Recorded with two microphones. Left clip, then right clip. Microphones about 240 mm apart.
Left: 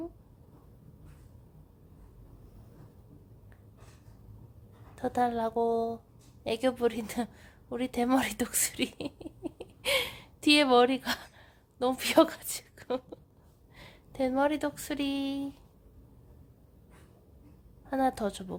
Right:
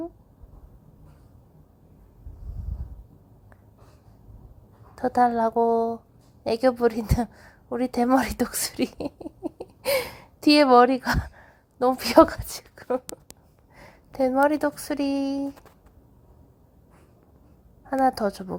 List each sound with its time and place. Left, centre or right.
4.9 s speech: centre
9.8 s gasp: centre
12.7 s a sound: centre
13.7 s a sound: centre
14.3 s speech: centre
15.2 s a woman's voice: centre
17.8 s a woman's voice: centre